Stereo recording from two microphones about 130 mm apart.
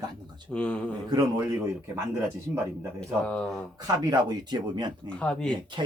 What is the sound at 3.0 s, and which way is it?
Speech, 5° left (ahead or behind).